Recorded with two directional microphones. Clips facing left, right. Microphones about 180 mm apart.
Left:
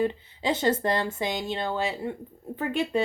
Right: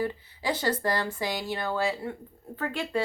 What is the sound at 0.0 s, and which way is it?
Speech, 20° left (ahead or behind).